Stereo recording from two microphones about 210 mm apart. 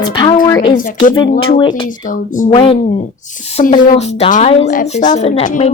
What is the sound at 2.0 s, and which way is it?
Speech, 40° left (ahead or behind).